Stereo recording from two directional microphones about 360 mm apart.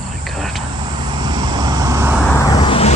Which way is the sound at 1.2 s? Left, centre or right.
Centre.